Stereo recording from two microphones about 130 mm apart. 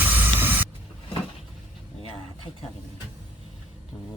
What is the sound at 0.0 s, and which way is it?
Spray, 15° right (ahead or behind).